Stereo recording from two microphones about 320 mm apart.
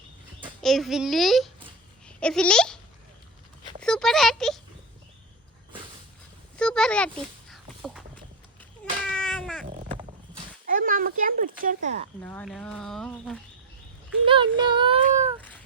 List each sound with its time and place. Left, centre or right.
0.6 s a child's voice: centre
3.8 s a sound: centre
6.6 s a sound: centre
9.0 s cat: centre
10.7 s a child's voice: right
12.2 s speech: centre
14.3 s speech: centre